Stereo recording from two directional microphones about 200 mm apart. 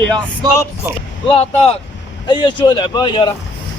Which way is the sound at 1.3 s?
30° left (ahead or behind).